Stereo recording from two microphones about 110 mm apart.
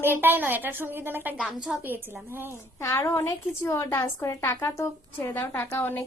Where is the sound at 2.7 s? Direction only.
25° left (ahead or behind).